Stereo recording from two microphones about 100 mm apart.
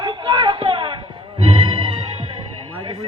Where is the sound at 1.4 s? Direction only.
65° right (ahead or behind).